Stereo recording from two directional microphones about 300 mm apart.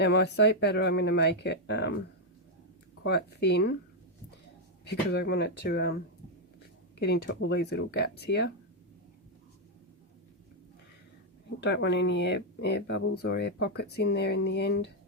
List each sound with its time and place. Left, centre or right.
0.0 s speech: left
3.0 s speech: left
4.9 s speech: left
7.0 s speech: left
11.6 s speech: left